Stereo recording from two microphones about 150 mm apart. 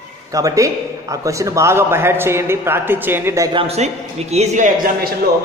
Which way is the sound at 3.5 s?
45° right (ahead or behind).